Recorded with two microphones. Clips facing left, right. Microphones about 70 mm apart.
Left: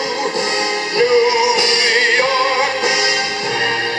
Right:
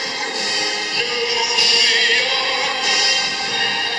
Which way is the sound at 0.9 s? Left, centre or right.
Left.